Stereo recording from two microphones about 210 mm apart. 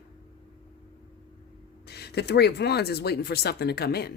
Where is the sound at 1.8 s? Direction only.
50° left (ahead or behind).